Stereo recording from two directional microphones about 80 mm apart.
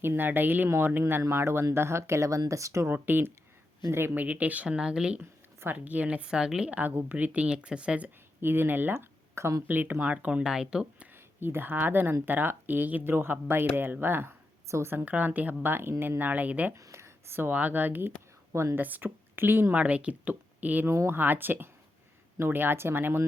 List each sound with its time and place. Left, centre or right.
0.0 s speech: right
2.9 s speech: right
5.2 s a sound: right
5.7 s a woman's voice: centre
8.4 s speech: right
9.6 s a woman's voice: right; by 10.8 s centre
11.3 s speech: right
16.7 s speech: right
18.5 s speech: right
18.8 s speech: right
20.9 s speech: right
21.2 s speech: right